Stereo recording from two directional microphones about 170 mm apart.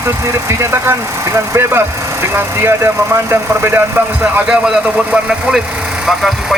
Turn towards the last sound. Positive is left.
turn(degrees=0)  # may be behind; listen again after turning